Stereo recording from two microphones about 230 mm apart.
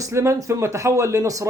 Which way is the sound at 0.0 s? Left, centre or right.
Centre.